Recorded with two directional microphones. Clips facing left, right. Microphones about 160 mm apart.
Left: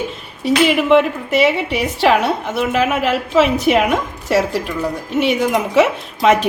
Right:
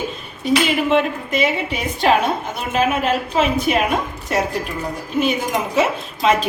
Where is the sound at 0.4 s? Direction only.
70° left (ahead or behind).